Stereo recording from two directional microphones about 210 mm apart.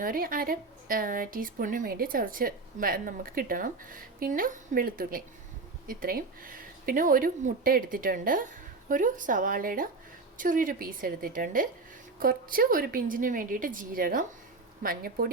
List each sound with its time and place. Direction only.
0.0 s speech: 40° right (ahead or behind)